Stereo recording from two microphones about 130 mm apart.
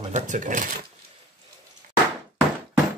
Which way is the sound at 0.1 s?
80° right.